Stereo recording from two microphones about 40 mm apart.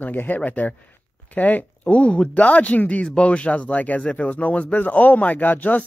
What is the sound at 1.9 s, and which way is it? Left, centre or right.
Speech, left.